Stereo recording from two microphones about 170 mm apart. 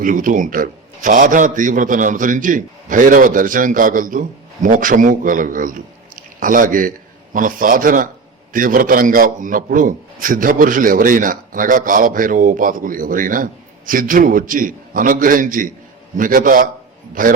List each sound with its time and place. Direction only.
0.0 s a man's voice: 50° right (ahead or behind)